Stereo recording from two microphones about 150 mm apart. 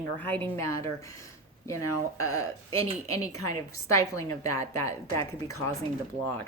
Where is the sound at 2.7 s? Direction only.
40° right (ahead or behind).